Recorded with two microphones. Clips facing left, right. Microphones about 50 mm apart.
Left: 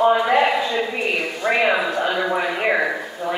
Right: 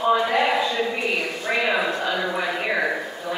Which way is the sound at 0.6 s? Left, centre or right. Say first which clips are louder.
Left 1 dB; centre.